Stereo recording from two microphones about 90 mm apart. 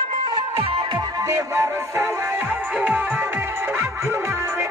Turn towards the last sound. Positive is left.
turn(degrees=-15)  # may be behind; listen again after turning